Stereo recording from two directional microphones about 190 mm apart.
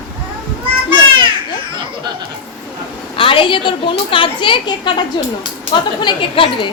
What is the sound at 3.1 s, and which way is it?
A child's voice, 30° left (ahead or behind).